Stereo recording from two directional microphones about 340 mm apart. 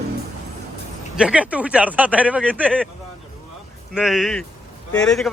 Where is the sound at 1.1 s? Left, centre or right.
Centre.